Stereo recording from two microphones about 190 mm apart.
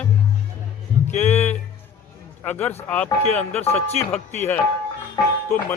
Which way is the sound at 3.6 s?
30° left (ahead or behind).